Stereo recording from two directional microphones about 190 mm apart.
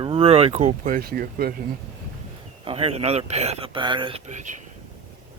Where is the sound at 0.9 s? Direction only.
50° right (ahead or behind).